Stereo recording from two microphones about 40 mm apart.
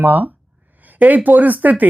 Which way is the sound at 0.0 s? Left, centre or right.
Right.